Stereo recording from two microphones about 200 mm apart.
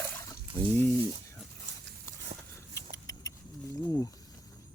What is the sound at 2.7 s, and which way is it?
Vehicle, 15° left (ahead or behind).